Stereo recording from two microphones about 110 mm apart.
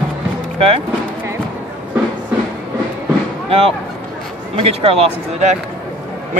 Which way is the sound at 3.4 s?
60° right (ahead or behind).